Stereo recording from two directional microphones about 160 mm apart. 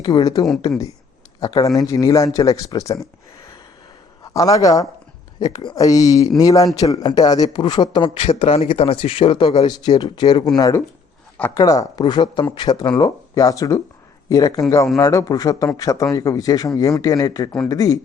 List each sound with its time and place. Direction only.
0.0 s a man's voice: 25° left (ahead or behind)
4.2 s a man's voice: 20° left (ahead or behind)
11.6 s a man's voice: 20° left (ahead or behind)